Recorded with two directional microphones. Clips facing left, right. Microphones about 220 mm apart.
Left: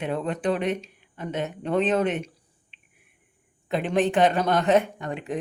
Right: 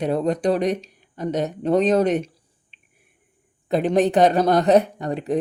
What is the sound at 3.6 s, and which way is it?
Speech, 40° right (ahead or behind).